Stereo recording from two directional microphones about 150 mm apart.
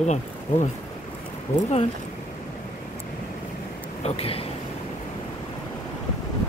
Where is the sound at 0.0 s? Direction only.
50° left (ahead or behind).